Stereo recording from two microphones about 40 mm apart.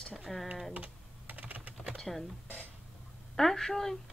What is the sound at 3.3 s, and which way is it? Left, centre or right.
Speech, centre.